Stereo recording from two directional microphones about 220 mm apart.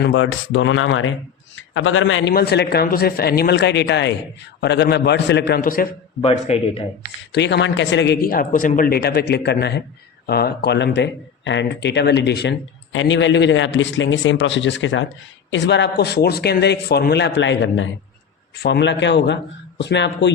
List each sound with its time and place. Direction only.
0.0 s a man's voice: 60° left (ahead or behind)
2.3 s speech: 45° left (ahead or behind)
6.2 s speech: 30° left (ahead or behind)
7.3 s speech: 50° left (ahead or behind)